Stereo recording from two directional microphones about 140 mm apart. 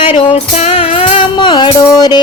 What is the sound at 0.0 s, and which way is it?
Music, 40° left (ahead or behind).